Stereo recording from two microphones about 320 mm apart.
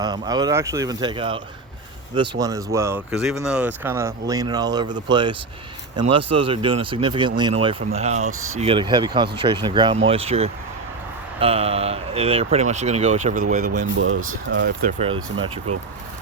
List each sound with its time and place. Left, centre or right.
0.0 s speech: centre